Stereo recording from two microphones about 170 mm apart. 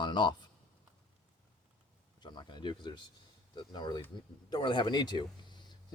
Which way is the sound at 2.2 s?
25° left (ahead or behind).